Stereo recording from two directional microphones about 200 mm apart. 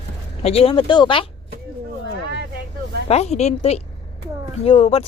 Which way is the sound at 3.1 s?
30° left (ahead or behind).